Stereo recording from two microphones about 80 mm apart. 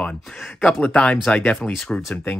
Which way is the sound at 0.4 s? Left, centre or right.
Centre.